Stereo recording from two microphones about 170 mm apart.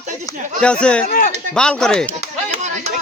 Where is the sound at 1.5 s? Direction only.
5° left (ahead or behind).